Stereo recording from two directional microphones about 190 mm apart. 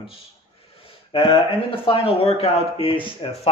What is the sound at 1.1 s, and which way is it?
Speech, 25° left (ahead or behind).